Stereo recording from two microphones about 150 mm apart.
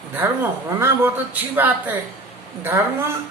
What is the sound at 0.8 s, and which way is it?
A woman's voice, 15° right (ahead or behind).